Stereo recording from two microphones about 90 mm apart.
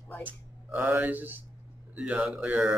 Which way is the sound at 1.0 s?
20° right (ahead or behind).